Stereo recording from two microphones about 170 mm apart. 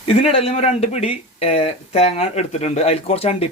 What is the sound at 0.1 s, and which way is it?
Speech, 35° left (ahead or behind).